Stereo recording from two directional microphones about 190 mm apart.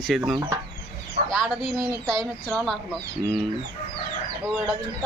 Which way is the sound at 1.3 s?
Centre (ahead or behind).